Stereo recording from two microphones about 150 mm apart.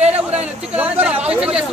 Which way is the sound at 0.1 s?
45° right (ahead or behind).